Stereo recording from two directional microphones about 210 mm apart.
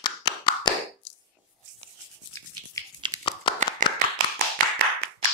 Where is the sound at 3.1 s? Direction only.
20° right (ahead or behind).